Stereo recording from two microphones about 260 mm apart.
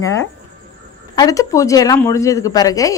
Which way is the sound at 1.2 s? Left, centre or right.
Centre.